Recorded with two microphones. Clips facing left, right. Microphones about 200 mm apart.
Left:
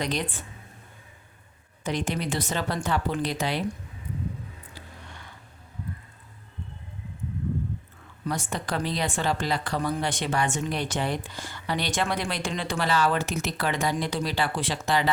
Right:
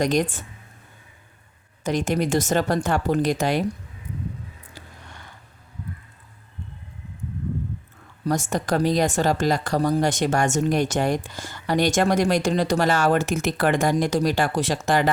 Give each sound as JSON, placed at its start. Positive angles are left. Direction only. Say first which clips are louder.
{"t": 0.0, "sound": "speech", "louder": "right 8 dB", "side_deg": -45}
{"t": 1.8, "sound": "speech", "louder": "right 6 dB", "side_deg": -45}
{"t": 8.2, "sound": "speech", "louder": "right 7 dB", "side_deg": -45}